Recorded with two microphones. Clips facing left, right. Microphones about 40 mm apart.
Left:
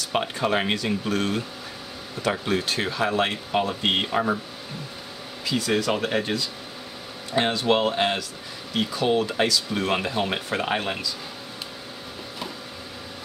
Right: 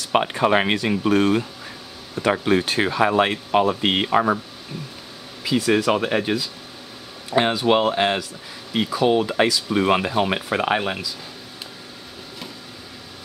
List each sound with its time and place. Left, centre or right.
0.1 s speech: right
4.1 s speech: right
5.4 s speech: centre